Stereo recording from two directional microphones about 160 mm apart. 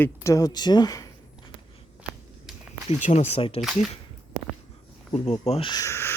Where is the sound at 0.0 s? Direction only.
20° left (ahead or behind).